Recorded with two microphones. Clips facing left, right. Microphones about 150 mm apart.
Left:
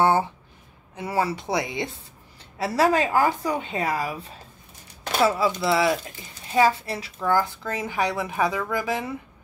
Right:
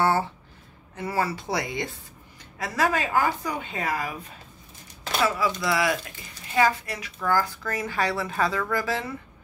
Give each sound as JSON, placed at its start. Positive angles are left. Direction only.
{"t": 0.0, "sound": "a sound", "side_deg": 20}
{"t": 0.9, "sound": "speech", "side_deg": 20}
{"t": 2.6, "sound": "a woman's voice", "side_deg": 35}